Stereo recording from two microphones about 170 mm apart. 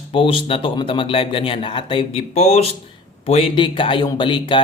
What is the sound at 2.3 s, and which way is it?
A man's voice, 40° left (ahead or behind).